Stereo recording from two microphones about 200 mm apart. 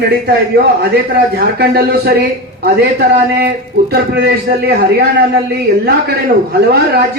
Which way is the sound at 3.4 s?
55° right (ahead or behind).